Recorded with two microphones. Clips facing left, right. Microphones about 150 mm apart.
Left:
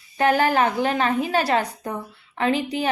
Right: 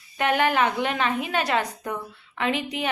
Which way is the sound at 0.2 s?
35° left (ahead or behind).